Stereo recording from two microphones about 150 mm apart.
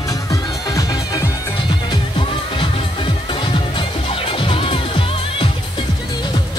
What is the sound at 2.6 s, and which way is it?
Music, 35° left (ahead or behind).